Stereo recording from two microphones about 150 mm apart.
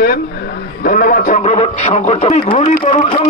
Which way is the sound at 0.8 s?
70° left (ahead or behind).